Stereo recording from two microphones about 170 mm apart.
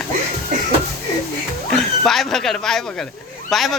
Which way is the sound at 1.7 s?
Centre (ahead or behind).